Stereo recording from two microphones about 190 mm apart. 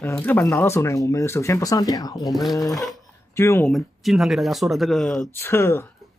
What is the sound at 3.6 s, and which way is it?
Speech, centre (ahead or behind).